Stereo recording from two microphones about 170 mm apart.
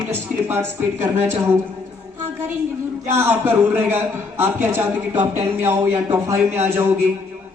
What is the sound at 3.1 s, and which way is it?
A man's voice, 10° right (ahead or behind).